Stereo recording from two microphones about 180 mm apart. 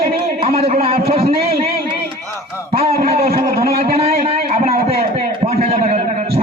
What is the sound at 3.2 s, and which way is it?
Speech, 55° right (ahead or behind).